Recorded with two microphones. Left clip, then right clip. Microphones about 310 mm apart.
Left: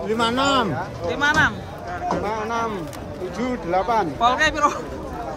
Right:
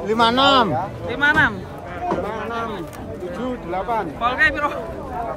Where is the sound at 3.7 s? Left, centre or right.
Left.